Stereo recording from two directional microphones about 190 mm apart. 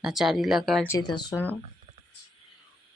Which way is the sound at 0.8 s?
20° left (ahead or behind).